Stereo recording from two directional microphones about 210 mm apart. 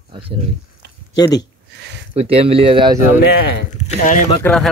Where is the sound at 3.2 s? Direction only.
50° left (ahead or behind).